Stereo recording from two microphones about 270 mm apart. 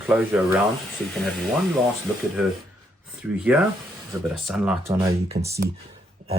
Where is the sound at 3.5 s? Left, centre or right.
Centre.